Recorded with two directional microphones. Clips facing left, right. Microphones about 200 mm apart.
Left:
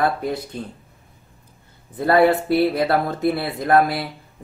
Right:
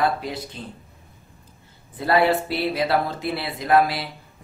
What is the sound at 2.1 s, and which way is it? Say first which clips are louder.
Speech: left 4 dB; 55° left (ahead or behind).